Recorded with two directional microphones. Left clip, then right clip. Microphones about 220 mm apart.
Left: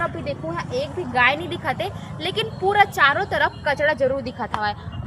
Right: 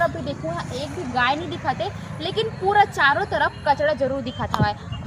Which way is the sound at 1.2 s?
45° left (ahead or behind).